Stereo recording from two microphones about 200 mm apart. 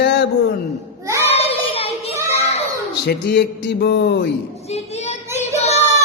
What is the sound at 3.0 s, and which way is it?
Mantra, 55° left (ahead or behind).